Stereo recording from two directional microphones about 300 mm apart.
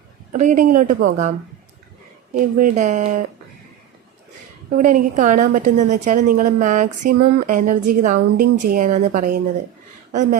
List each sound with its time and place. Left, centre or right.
0.3 s a woman's voice: right
2.3 s a woman's voice: right
4.8 s a woman's voice: right